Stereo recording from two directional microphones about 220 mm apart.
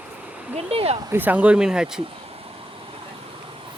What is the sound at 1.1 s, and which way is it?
Speech, 10° right (ahead or behind).